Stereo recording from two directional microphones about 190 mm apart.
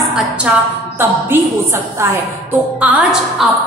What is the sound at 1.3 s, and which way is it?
Music, 10° right (ahead or behind).